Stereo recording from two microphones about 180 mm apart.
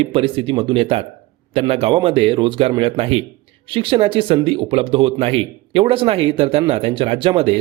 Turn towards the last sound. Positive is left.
turn(degrees=-30)  # may be behind; listen again after turning